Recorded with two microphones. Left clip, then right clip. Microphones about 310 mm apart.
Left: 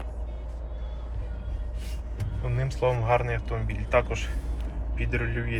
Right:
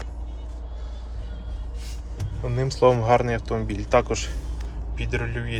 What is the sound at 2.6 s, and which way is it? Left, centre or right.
Speech, right.